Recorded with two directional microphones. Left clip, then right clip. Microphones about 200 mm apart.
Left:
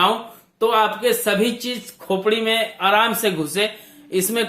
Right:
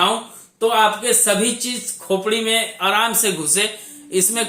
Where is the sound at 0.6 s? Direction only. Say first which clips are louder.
Right 1 dB; 45° left (ahead or behind).